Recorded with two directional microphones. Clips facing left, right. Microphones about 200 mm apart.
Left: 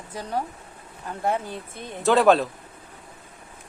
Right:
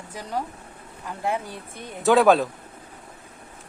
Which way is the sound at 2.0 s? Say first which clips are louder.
Right 1 dB; centre (ahead or behind).